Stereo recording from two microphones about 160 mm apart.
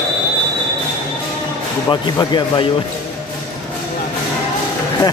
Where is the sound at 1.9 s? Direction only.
30° left (ahead or behind).